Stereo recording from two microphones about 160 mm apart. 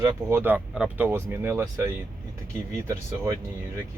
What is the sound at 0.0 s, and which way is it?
Speech, 20° right (ahead or behind).